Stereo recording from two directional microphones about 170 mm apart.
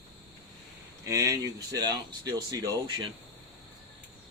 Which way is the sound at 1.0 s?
20° right (ahead or behind).